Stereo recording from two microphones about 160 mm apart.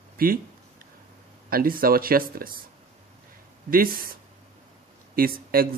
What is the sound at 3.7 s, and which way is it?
Speech, 65° right (ahead or behind).